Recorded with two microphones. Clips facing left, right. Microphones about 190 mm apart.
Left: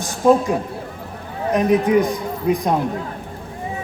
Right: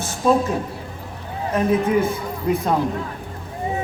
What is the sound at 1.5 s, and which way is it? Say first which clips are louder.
A man's voice: left 3 dB; 15° left (ahead or behind).